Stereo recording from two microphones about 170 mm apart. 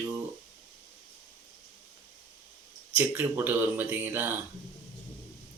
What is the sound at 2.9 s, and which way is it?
Speech, 10° right (ahead or behind).